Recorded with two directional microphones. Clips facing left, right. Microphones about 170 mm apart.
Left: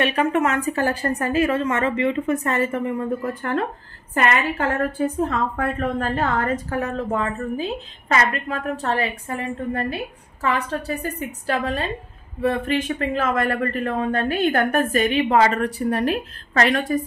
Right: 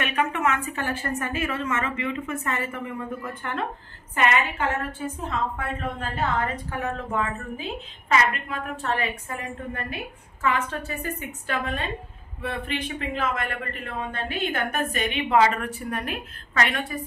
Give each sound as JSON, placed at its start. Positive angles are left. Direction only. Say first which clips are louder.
{"t": 0.0, "sound": "a woman's voice", "louder": "left 5 dB", "side_deg": 35}
{"t": 4.1, "sound": "a woman's voice", "louder": "left 3 dB", "side_deg": 40}